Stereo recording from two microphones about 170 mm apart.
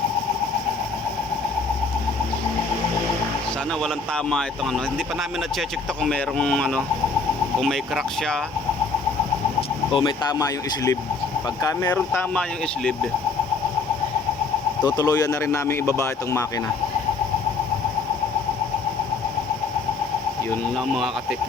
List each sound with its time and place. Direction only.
3.8 s speech: 5° left (ahead or behind)
9.6 s speech: 30° left (ahead or behind); by 12.9 s 5° left (ahead or behind)
14.8 s speech: 20° left (ahead or behind)
20.9 s speech: centre (ahead or behind)